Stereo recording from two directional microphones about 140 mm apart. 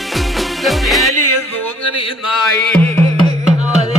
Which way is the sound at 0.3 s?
Centre (ahead or behind).